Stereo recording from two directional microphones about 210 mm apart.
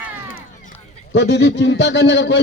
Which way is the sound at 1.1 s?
55° left (ahead or behind).